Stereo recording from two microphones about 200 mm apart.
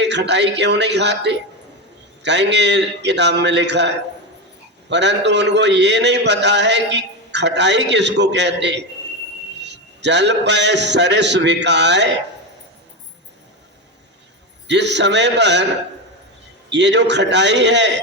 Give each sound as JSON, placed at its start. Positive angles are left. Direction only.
{"t": 0.0, "sound": "a man's voice", "side_deg": -60}
{"t": 14.7, "sound": "a man's voice", "side_deg": -60}
{"t": 16.6, "sound": "a man's voice", "side_deg": -60}